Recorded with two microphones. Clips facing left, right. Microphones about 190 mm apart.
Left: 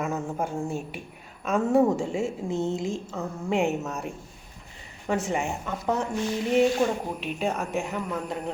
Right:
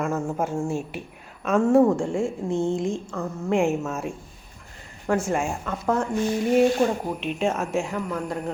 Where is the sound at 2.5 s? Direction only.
30° right (ahead or behind).